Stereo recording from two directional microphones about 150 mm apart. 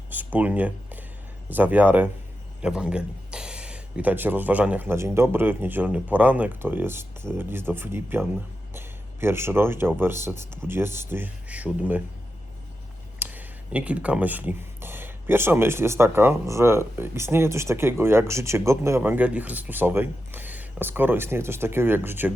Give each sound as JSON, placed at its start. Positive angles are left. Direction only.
{"t": 0.1, "sound": "speech", "side_deg": -10}
{"t": 13.1, "sound": "speech", "side_deg": -10}